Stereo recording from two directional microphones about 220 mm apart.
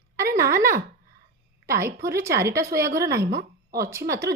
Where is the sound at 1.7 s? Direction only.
10° right (ahead or behind).